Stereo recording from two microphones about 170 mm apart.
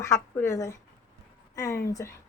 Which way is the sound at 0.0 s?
15° left (ahead or behind).